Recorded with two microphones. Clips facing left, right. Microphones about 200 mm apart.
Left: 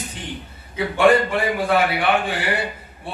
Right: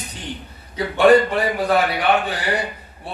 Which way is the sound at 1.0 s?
40° right (ahead or behind).